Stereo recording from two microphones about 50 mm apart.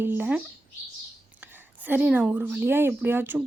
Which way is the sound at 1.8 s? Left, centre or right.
Right.